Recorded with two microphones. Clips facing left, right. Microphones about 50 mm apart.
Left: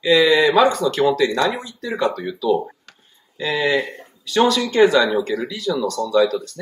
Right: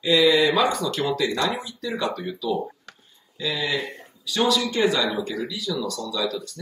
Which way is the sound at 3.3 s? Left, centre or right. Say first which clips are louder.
Left 7 dB; left.